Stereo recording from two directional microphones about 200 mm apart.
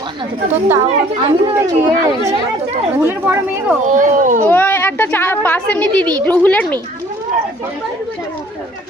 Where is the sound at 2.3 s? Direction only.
30° right (ahead or behind).